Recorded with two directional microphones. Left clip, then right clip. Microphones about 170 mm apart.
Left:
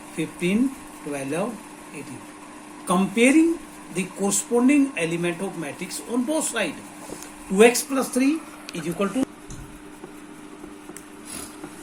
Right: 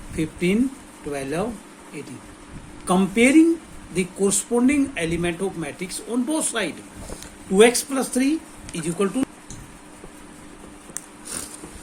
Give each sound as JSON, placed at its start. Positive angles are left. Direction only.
{"t": 0.2, "sound": "speech", "side_deg": -50}
{"t": 2.8, "sound": "speech", "side_deg": -50}